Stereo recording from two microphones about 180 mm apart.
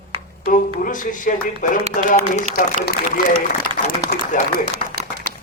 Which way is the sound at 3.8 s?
45° left (ahead or behind).